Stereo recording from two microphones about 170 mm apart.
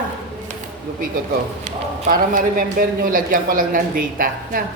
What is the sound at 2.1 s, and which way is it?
Speech, 55° right (ahead or behind).